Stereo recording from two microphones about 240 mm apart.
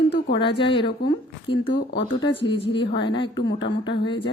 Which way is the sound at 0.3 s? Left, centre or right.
Left.